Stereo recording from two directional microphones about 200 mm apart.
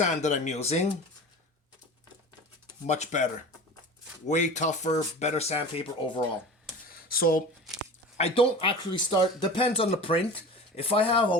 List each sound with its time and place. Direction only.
0.0 s speech: 35° left (ahead or behind)
2.8 s speech: 35° left (ahead or behind)
4.3 s speech: 35° left (ahead or behind)
7.1 s speech: 45° left (ahead or behind)
8.2 s speech: 25° left (ahead or behind)